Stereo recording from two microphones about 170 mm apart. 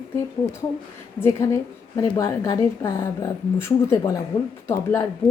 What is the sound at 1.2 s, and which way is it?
A woman's voice, 15° left (ahead or behind).